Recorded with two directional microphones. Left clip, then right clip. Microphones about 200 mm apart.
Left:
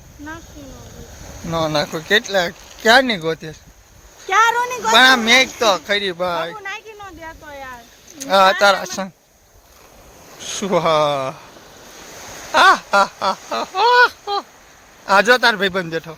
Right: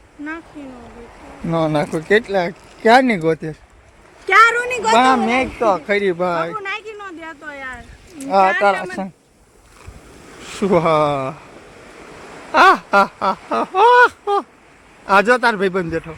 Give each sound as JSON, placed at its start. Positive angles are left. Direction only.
{"t": 1.5, "sound": "speech", "side_deg": -10}
{"t": 4.3, "sound": "a woman's voice", "side_deg": 10}
{"t": 5.2, "sound": "speech", "side_deg": 5}
{"t": 5.5, "sound": "a woman's voice", "side_deg": 15}
{"t": 5.8, "sound": "speech", "side_deg": -5}
{"t": 6.6, "sound": "a sound", "side_deg": 0}
{"t": 8.3, "sound": "a woman's voice", "side_deg": 10}
{"t": 10.4, "sound": "speech", "side_deg": -10}
{"t": 12.5, "sound": "speech", "side_deg": -5}
{"t": 15.0, "sound": "speech", "side_deg": 0}